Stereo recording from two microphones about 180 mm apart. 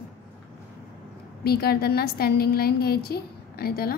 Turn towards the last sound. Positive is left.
turn(degrees=55)  # may be behind; listen again after turning